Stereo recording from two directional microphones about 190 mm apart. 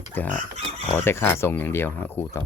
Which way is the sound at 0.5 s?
35° right (ahead or behind).